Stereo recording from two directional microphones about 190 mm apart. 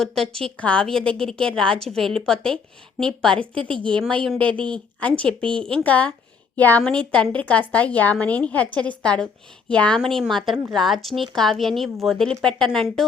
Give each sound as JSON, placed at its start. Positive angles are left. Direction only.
{"t": 0.0, "sound": "a woman's voice", "side_deg": 0}
{"t": 3.5, "sound": "a woman's voice", "side_deg": -25}
{"t": 3.9, "sound": "a woman's voice", "side_deg": 5}